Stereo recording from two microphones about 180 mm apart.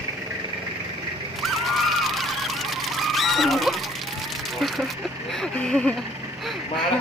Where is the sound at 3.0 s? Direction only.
Centre (ahead or behind).